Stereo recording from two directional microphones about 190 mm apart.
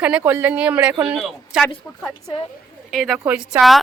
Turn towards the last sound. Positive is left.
turn(degrees=0)  # may be behind; listen again after turning